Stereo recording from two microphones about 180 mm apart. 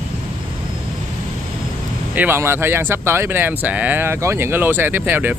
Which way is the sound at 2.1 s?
10° right (ahead or behind).